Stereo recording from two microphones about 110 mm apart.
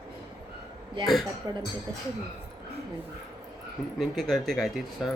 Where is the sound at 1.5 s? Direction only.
40° right (ahead or behind).